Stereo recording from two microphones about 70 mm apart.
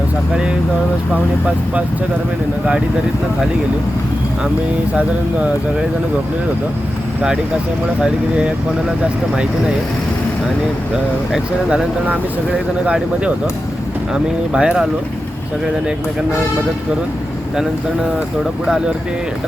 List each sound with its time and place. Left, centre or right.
1.1 s speech: centre
8.0 s speech: centre
10.9 s speech: centre